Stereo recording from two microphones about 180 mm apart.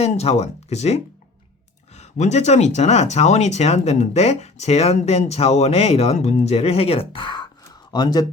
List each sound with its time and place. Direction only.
0.0 s speech: 35° left (ahead or behind)